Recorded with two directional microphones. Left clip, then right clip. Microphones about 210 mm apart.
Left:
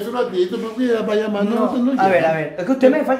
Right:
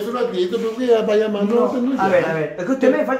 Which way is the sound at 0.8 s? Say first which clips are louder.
Right 3 dB; 20° left (ahead or behind).